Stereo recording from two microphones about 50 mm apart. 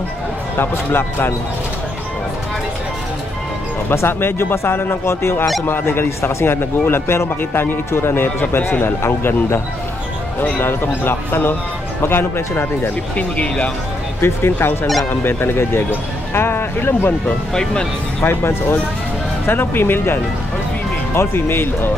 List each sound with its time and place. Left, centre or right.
0.6 s speech: left
3.9 s speech: left
5.7 s speech: left
13.1 s speech: left
14.2 s speech: left
18.2 s speech: left
21.2 s speech: left